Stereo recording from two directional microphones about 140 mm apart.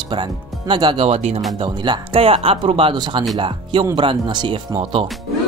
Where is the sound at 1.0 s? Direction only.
50° right (ahead or behind).